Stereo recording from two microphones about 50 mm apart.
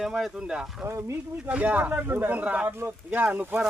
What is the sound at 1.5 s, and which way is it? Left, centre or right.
Speech, right.